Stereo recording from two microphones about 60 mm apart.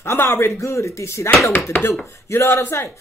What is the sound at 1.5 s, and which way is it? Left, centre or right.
Speech, left.